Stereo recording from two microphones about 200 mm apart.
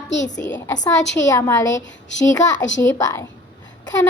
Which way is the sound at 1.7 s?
65° left (ahead or behind).